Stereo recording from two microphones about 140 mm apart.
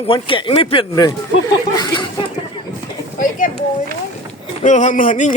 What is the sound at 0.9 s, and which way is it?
Speech, 25° left (ahead or behind).